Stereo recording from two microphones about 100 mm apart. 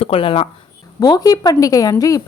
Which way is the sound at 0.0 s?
70° left (ahead or behind).